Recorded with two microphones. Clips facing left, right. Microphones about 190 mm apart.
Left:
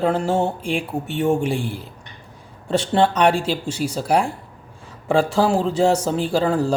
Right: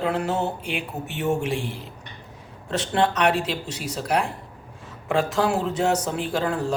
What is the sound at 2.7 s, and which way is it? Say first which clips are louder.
Speech: left 5 dB; 30° left (ahead or behind).